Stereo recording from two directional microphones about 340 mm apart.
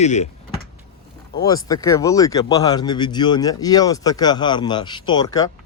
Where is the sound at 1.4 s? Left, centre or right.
Centre.